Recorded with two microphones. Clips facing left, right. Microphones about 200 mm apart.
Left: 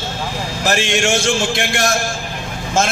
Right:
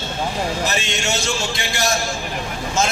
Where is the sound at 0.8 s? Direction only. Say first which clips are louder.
Left 7 dB; 90° left.